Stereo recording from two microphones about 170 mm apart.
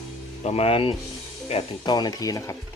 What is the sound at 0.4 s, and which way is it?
Speech, 35° left (ahead or behind).